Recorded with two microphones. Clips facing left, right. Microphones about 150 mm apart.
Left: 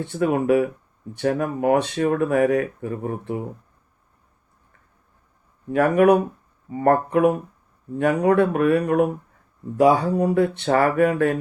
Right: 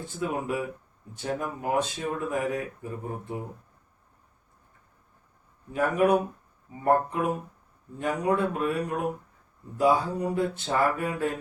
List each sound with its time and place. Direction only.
0.0 s speech: 70° left (ahead or behind)
5.7 s speech: 75° left (ahead or behind)